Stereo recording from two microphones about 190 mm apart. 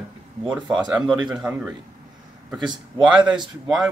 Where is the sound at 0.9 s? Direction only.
5° right (ahead or behind).